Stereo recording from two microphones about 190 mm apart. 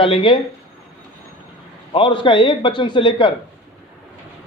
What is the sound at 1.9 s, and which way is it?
A man's voice, 25° left (ahead or behind).